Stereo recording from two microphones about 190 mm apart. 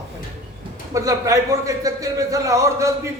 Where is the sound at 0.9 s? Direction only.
15° right (ahead or behind).